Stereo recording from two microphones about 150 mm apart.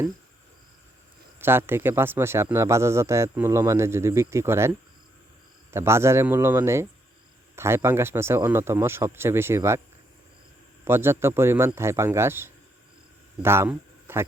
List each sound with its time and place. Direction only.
1.4 s a man's voice: 15° right (ahead or behind)
5.7 s a man's voice: 15° right (ahead or behind)
10.8 s a man's voice: 15° right (ahead or behind)